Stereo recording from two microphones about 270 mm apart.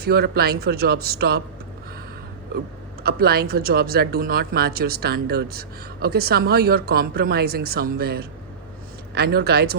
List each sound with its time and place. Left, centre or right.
0.0 s speech: right
3.0 s speech: right